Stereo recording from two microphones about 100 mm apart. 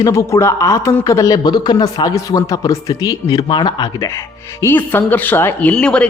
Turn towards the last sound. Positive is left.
turn(degrees=10)  # may be behind; listen again after turning